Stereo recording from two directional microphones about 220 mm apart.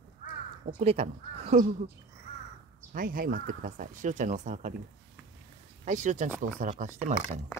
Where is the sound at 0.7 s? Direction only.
30° right (ahead or behind).